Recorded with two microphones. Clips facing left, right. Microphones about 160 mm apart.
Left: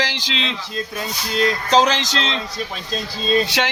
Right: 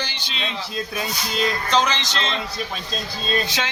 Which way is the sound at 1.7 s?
40° left (ahead or behind).